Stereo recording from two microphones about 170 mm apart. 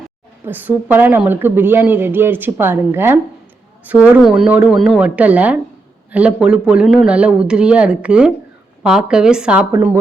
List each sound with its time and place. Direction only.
0.4 s a woman's voice: 10° right (ahead or behind)
9.7 s a woman's voice: 15° right (ahead or behind)